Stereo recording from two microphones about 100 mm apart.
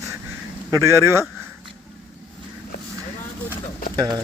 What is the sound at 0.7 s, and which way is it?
Speech, 30° right (ahead or behind).